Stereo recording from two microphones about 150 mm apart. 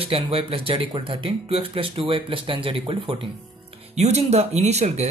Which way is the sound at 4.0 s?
45° right (ahead or behind).